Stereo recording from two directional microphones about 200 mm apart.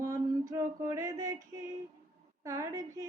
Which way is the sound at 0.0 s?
15° right (ahead or behind).